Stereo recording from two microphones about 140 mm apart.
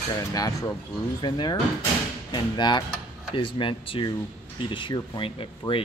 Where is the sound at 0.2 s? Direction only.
25° left (ahead or behind).